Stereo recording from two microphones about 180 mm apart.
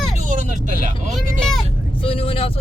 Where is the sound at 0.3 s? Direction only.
45° right (ahead or behind).